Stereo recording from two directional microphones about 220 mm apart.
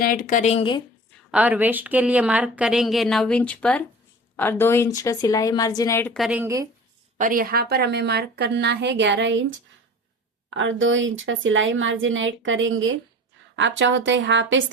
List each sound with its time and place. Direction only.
0.0 s speech: 40° left (ahead or behind)
1.1 s speech: 5° right (ahead or behind); by 6.1 s 10° left (ahead or behind)
6.1 s speech: 5° right (ahead or behind)
7.2 s a woman's voice: 40° right (ahead or behind); by 14.6 s 55° right (ahead or behind)